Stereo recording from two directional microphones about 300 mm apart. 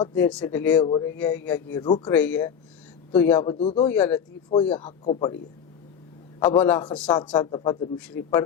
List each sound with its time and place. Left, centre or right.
0.0 s a man's voice: centre
2.1 s a man's voice: centre
3.8 s speech: centre
4.4 s a man's voice: centre
6.4 s a man's voice: centre